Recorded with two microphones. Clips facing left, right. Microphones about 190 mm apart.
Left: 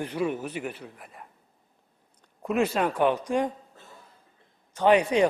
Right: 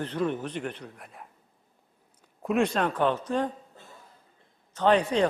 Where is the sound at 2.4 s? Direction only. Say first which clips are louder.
Even; 5° left (ahead or behind).